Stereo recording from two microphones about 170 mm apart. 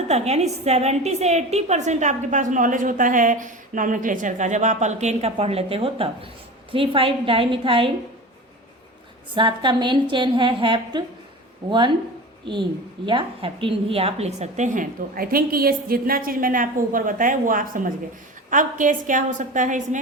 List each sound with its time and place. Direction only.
0.1 s a woman's voice: 40° right (ahead or behind)
9.3 s a woman's voice: 30° right (ahead or behind)
13.1 s a woman's voice: 30° right (ahead or behind); by 20.0 s 45° right (ahead or behind)